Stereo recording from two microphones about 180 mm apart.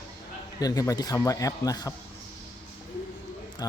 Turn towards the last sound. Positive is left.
turn(degrees=20)  # may be behind; listen again after turning